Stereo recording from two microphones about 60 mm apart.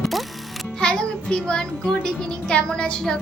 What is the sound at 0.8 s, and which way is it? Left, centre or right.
Music, centre.